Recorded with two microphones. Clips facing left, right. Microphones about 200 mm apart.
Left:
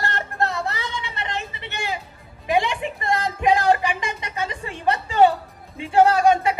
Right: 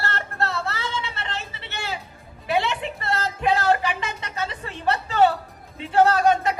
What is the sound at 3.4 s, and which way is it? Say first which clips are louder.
Music: left 2 dB; 15° left (ahead or behind).